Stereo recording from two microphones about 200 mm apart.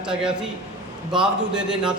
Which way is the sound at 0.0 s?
5° right (ahead or behind).